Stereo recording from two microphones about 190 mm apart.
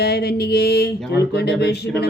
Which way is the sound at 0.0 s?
60° left (ahead or behind).